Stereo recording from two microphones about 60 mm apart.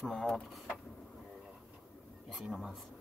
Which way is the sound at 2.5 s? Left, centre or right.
Centre.